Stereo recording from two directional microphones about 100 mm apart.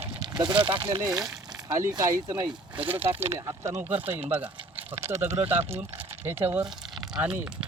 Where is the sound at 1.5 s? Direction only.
45° right (ahead or behind).